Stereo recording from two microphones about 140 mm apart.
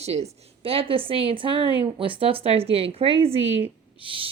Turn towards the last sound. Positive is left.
turn(degrees=-40)  # may be behind; listen again after turning